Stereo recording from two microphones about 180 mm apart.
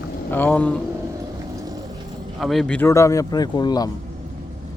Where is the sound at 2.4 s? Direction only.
Centre (ahead or behind); by 3.9 s 20° left (ahead or behind).